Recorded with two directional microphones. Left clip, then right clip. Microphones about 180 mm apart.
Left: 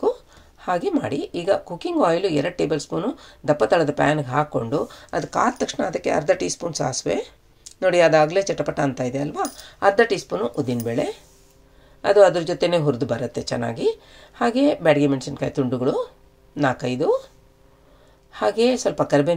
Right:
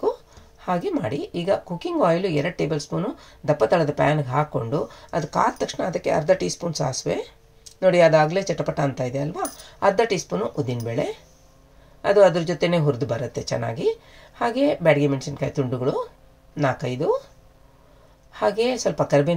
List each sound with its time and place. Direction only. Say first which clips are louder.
0.6 s speech: left 2 dB; 30° left (ahead or behind)
18.3 s speech: left 2 dB; 30° left (ahead or behind)